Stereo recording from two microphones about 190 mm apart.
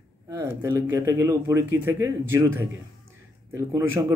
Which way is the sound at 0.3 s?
15° right (ahead or behind).